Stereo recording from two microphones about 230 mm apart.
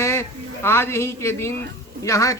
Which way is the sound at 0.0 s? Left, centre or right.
Centre.